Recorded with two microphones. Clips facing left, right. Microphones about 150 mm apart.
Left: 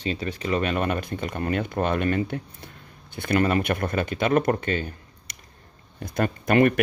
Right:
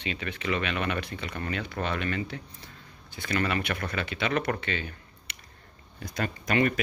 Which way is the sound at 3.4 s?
45° left (ahead or behind).